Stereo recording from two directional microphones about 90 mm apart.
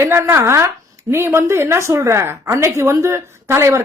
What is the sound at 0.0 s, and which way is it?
A woman's voice, 30° right (ahead or behind).